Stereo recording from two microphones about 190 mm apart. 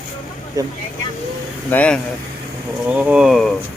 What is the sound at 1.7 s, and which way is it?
Speech, 5° left (ahead or behind).